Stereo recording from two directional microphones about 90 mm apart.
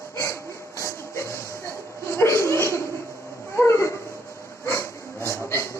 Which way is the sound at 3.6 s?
30° left (ahead or behind).